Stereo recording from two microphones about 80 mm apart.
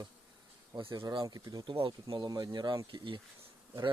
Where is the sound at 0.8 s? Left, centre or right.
Right.